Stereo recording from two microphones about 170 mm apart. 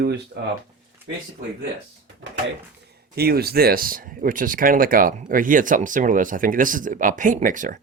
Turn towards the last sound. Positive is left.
turn(degrees=-50)  # may be behind; listen again after turning